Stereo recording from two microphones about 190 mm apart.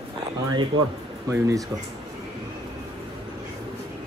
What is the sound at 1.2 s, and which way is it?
Speech, 15° right (ahead or behind).